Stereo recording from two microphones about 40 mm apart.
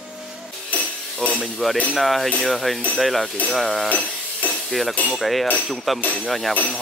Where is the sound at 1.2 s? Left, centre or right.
Left.